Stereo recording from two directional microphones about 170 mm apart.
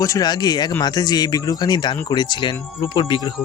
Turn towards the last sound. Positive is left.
turn(degrees=30)  # may be behind; listen again after turning